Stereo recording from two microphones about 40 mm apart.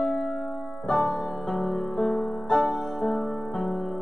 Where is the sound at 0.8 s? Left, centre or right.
Centre.